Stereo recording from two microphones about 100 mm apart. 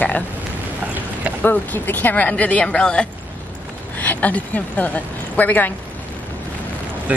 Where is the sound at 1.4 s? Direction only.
20° left (ahead or behind).